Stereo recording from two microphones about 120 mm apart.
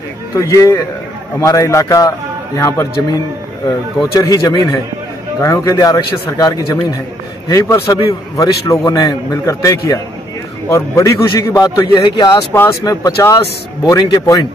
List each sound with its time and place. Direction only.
0.3 s a man's voice: 25° left (ahead or behind)
4.2 s a man's voice: 30° left (ahead or behind)